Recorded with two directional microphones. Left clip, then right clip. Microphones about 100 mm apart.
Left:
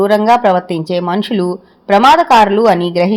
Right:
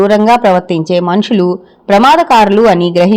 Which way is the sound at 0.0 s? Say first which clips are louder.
Right 2 dB; 30° right (ahead or behind).